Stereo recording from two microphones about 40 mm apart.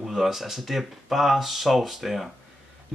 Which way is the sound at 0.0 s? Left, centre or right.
Centre.